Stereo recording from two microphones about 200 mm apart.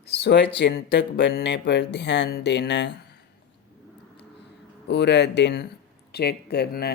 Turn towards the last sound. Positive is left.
turn(degrees=55)  # may be behind; listen again after turning